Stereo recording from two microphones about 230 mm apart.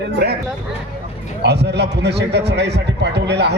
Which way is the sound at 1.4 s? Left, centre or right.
Right.